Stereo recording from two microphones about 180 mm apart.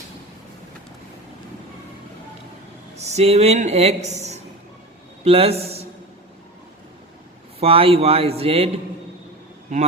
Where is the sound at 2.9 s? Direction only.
35° right (ahead or behind).